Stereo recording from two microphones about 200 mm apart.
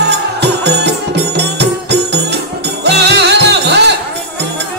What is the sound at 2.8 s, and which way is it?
Music, 55° right (ahead or behind).